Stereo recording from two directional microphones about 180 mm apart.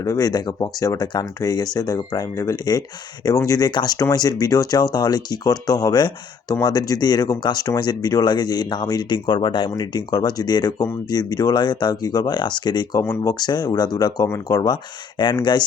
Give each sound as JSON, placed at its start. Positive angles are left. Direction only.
{"t": 0.0, "sound": "speech", "side_deg": 20}